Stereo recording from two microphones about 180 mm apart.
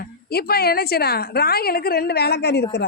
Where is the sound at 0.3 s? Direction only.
60° left (ahead or behind).